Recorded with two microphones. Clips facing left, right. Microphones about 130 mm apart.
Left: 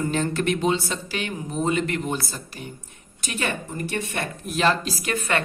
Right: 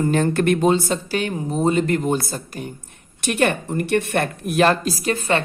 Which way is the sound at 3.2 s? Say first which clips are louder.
Right 9 dB; 65° right (ahead or behind).